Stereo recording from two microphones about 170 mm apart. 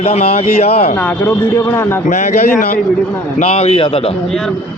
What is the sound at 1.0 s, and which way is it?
A man's voice, 10° left (ahead or behind).